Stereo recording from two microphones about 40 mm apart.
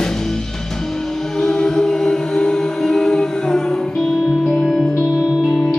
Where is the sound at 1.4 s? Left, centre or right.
Centre.